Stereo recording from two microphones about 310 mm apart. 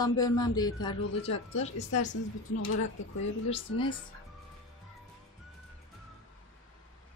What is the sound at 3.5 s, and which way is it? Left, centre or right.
Speech, centre.